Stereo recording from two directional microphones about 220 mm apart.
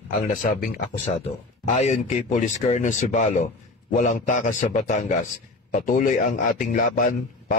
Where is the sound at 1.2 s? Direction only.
30° left (ahead or behind).